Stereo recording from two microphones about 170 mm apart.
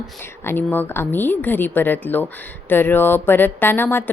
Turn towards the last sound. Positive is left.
turn(degrees=10)  # may be behind; listen again after turning